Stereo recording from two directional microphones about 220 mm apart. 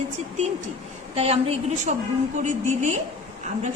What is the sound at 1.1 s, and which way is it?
A woman's voice, 30° right (ahead or behind).